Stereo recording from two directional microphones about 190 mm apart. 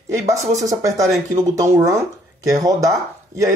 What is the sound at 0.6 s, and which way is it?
Speech, 20° right (ahead or behind).